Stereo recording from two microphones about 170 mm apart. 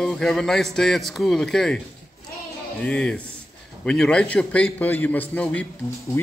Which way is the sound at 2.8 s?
5° left (ahead or behind).